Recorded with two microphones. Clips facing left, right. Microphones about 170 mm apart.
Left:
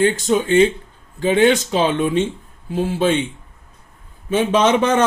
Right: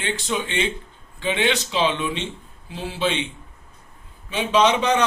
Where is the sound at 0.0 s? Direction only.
45° left (ahead or behind).